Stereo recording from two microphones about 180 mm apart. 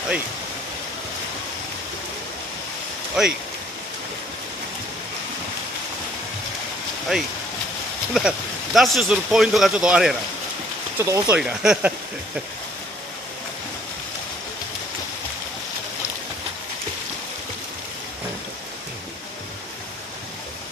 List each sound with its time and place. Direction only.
3.2 s speech: 5° right (ahead or behind)
7.1 s speech: centre (ahead or behind)
11.0 s speech: 15° right (ahead or behind)
11.3 s speech: 5° right (ahead or behind)